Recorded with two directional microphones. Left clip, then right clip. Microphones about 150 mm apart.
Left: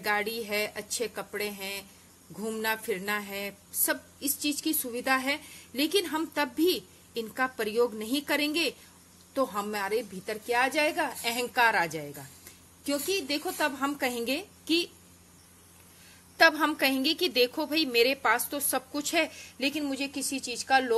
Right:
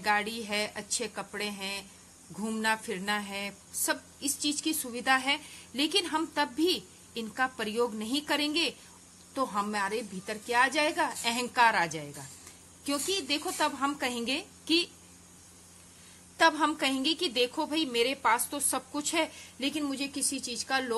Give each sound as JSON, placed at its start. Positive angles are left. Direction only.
{"t": 0.0, "sound": "a woman's voice", "side_deg": 25}
{"t": 16.3, "sound": "a woman's voice", "side_deg": 25}